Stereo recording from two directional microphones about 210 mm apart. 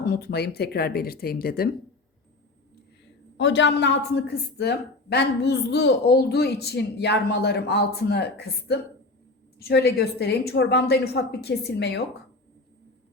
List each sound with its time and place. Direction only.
0.0 s speech: 50° left (ahead or behind)
3.3 s speech: 60° left (ahead or behind)